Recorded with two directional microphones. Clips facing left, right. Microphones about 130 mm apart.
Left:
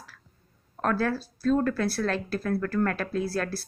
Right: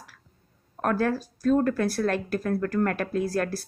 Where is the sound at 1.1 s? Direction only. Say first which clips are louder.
Right 2 dB; 15° right (ahead or behind).